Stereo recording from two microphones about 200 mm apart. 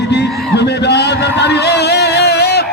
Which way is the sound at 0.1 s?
60° left (ahead or behind).